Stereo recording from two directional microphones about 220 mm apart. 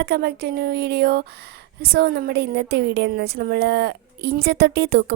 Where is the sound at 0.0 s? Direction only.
45° right (ahead or behind).